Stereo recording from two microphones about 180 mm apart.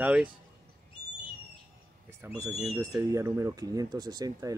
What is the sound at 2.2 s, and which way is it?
Speech, 15° right (ahead or behind).